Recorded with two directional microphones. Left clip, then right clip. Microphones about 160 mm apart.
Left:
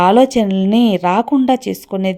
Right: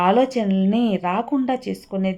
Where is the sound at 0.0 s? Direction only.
30° left (ahead or behind).